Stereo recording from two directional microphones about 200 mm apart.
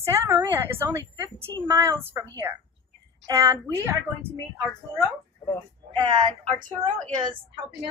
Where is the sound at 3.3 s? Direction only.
15° right (ahead or behind).